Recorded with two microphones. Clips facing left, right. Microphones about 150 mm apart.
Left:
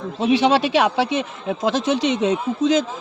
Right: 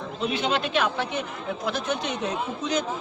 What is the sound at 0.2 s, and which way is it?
A man's voice, 90° left.